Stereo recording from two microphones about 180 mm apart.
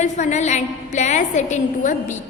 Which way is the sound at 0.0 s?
40° left (ahead or behind).